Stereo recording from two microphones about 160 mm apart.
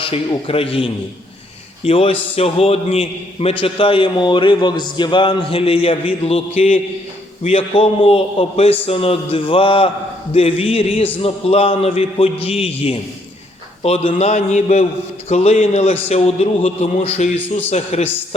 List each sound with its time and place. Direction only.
0.0 s a man's voice: 35° left (ahead or behind)